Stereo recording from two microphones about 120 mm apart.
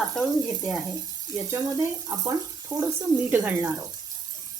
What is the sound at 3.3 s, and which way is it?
Speech, 20° right (ahead or behind).